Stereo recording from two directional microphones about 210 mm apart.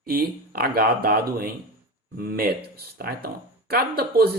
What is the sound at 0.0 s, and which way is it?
Speech, 45° right (ahead or behind).